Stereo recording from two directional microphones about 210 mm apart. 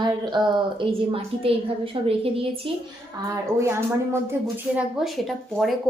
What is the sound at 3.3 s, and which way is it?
Speech, 15° right (ahead or behind).